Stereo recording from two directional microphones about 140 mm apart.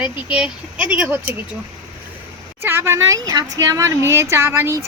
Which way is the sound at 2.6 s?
15° right (ahead or behind).